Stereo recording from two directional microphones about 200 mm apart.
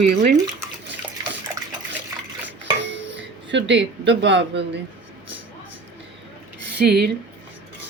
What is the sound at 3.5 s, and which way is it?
Speech, 65° right (ahead or behind).